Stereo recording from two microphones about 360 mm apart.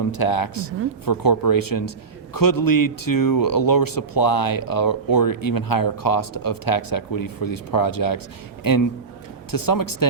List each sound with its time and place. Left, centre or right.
0.1 s speech: left